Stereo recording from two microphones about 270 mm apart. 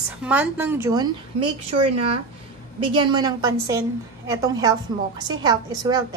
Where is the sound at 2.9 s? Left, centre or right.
Centre.